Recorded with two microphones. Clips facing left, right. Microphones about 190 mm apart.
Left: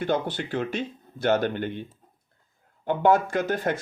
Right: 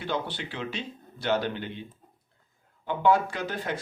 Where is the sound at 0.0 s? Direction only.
50° left (ahead or behind).